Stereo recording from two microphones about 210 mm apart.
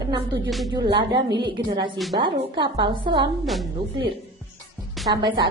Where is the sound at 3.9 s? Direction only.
25° right (ahead or behind).